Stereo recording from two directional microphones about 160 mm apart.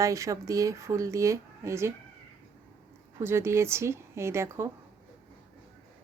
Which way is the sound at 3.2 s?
15° right (ahead or behind).